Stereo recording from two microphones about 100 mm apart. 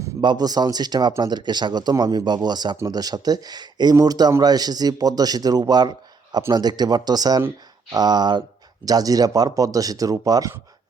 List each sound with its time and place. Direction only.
0.2 s speech: 45° right (ahead or behind)